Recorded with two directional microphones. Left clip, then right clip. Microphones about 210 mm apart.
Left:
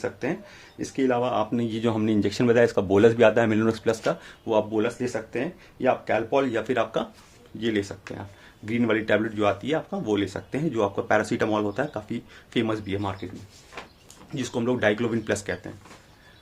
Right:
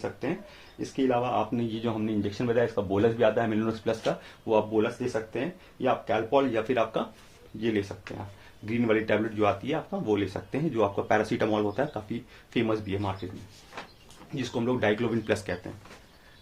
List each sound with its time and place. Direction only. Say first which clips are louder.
0.9 s speech: left 3 dB; 20° left (ahead or behind)
1.8 s speech: left 9 dB; 40° left (ahead or behind); by 13.1 s 20° left (ahead or behind)
14.3 s speech: left 3 dB; 25° left (ahead or behind)